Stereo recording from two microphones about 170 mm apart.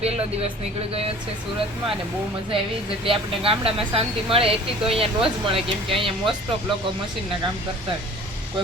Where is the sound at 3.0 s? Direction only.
30° right (ahead or behind).